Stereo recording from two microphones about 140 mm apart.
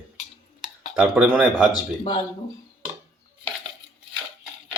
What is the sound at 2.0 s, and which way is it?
Speech, 40° left (ahead or behind).